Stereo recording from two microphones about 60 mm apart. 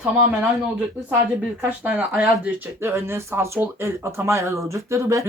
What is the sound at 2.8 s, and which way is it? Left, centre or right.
Speech, right.